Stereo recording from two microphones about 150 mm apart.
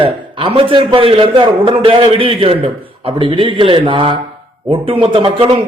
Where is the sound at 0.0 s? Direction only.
35° right (ahead or behind).